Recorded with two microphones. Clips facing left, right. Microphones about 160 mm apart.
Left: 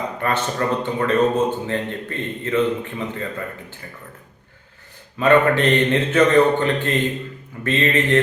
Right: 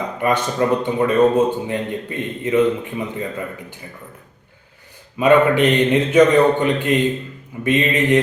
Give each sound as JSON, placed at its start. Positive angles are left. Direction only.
{"t": 0.2, "sound": "a man's voice", "side_deg": -15}
{"t": 5.1, "sound": "a man's voice", "side_deg": -10}